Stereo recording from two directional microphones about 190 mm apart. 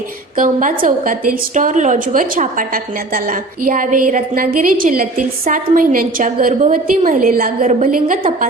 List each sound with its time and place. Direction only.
0.3 s a woman's voice: 45° right (ahead or behind)